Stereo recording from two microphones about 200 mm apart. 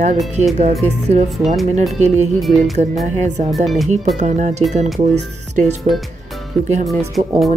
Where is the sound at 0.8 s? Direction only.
35° right (ahead or behind).